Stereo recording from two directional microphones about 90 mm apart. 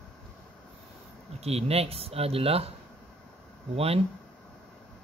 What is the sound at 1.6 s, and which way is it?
Speech, 90° right.